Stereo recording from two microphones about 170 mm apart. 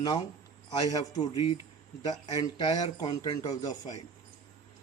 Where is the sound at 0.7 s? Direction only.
25° left (ahead or behind).